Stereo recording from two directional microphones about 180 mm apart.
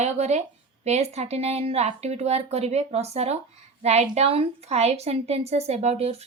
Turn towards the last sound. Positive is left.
turn(degrees=-35)  # may be behind; listen again after turning